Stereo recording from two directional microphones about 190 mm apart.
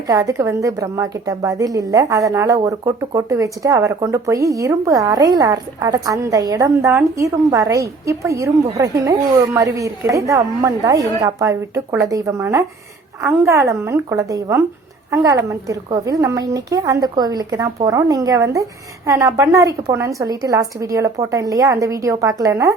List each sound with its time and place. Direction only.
0.1 s a woman's voice: 15° right (ahead or behind)